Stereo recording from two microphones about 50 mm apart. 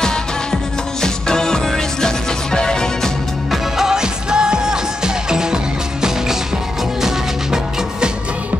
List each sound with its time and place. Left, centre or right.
0.0 s music: centre
3.7 s music: centre